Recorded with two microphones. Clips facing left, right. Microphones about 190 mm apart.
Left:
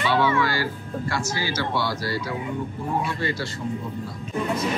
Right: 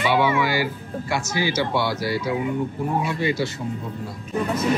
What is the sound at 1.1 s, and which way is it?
Speech, 20° right (ahead or behind).